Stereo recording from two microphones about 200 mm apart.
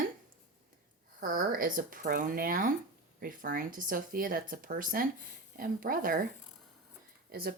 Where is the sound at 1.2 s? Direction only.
45° right (ahead or behind).